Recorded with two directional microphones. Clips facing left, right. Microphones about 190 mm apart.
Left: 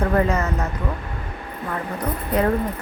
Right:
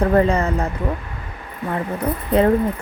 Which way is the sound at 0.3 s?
30° right (ahead or behind).